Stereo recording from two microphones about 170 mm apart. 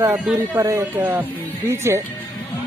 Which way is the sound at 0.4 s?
20° right (ahead or behind).